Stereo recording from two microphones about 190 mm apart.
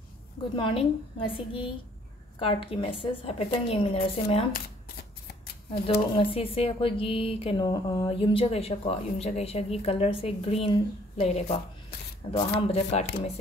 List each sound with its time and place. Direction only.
0.6 s speech: 25° left (ahead or behind)
5.9 s speech: 30° left (ahead or behind)